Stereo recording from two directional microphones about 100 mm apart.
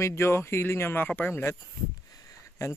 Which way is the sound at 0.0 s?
25° left (ahead or behind).